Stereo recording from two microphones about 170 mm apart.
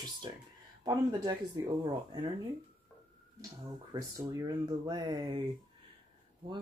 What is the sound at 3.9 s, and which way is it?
Speech, 20° right (ahead or behind).